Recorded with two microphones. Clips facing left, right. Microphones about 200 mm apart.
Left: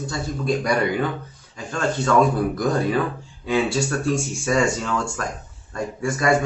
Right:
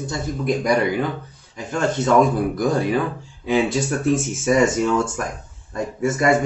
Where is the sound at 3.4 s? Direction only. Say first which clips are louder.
Right 2 dB; 20° right (ahead or behind).